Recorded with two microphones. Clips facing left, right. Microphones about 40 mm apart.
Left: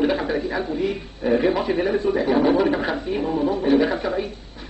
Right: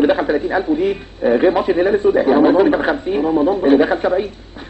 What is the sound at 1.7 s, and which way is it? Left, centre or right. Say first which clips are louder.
A man's voice: right 7 dB; right.